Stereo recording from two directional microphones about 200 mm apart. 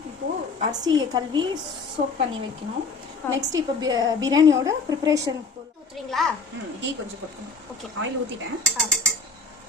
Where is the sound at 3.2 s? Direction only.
10° left (ahead or behind).